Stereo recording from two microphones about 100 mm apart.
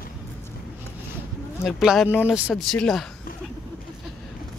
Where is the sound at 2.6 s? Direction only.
5° left (ahead or behind).